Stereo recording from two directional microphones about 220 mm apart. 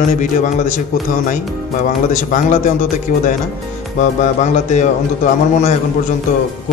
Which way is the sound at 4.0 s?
35° left (ahead or behind).